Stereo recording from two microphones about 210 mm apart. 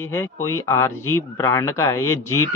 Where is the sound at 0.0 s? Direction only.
10° left (ahead or behind).